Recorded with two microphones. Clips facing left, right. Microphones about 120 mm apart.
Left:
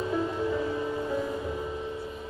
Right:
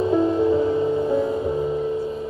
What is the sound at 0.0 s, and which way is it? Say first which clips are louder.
Music: right 10 dB; 25° right (ahead or behind).